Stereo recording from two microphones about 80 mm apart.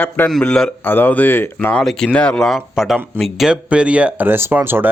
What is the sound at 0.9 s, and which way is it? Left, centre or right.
Speech, left.